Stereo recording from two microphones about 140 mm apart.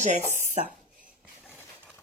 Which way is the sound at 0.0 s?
60° right (ahead or behind).